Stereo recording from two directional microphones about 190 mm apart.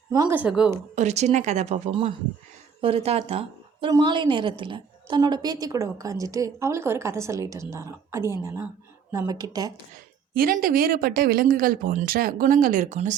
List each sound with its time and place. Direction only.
0.1 s speech: 20° right (ahead or behind)
0.3 s speech: 5° right (ahead or behind)
0.9 s a woman's voice: 35° right (ahead or behind); by 9.7 s 20° right (ahead or behind)
10.3 s speech: 50° right (ahead or behind)